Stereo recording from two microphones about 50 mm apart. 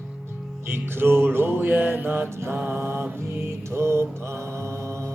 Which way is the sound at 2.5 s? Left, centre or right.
Right.